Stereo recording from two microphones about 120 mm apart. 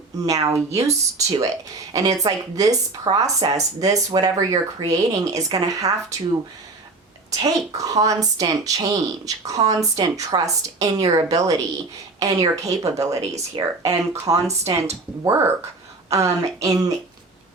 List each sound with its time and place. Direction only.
0.2 s speech: 30° right (ahead or behind)
7.4 s speech: 30° right (ahead or behind)